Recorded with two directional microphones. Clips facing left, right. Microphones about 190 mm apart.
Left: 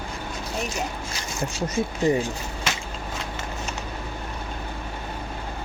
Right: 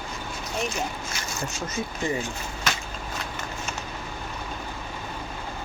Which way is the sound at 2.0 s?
40° left (ahead or behind).